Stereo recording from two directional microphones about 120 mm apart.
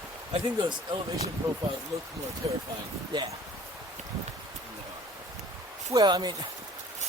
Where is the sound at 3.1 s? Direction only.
40° right (ahead or behind).